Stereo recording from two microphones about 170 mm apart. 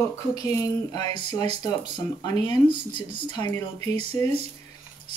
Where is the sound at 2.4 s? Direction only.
25° left (ahead or behind).